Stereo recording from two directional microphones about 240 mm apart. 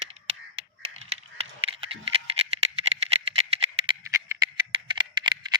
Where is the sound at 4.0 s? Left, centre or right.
Centre.